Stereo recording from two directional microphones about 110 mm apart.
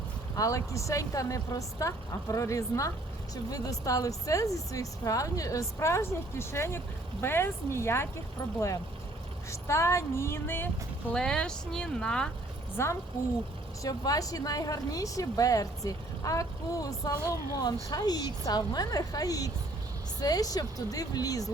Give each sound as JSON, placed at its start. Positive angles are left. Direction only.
{"t": 0.3, "sound": "speech", "side_deg": 30}
{"t": 11.1, "sound": "speech", "side_deg": 5}
{"t": 12.7, "sound": "a woman's voice", "side_deg": 25}